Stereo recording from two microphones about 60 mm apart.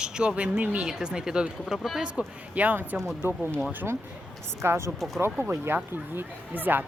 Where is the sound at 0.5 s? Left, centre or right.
Right.